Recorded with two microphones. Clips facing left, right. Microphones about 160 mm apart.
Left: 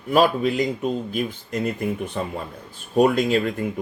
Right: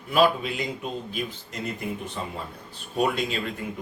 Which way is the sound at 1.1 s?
55° left (ahead or behind).